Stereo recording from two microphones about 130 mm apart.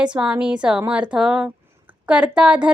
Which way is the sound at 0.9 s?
10° right (ahead or behind).